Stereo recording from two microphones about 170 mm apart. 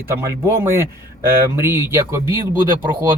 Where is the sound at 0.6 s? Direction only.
15° right (ahead or behind).